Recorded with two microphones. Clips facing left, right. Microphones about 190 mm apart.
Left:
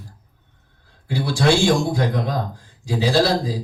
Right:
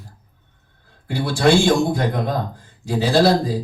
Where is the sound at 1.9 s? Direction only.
55° right (ahead or behind).